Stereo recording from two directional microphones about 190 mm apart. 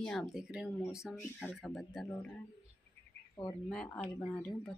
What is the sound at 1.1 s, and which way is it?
Speech, 10° left (ahead or behind).